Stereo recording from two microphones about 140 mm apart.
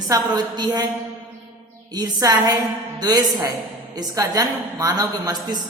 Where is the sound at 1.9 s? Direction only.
25° right (ahead or behind).